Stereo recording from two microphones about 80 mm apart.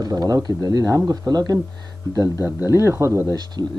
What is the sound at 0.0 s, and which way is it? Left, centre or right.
Speech, right.